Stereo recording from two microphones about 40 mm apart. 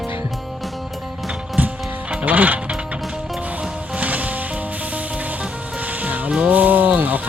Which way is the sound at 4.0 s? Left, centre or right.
Right.